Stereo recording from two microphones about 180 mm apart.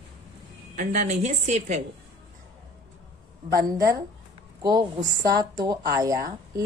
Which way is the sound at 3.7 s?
20° right (ahead or behind).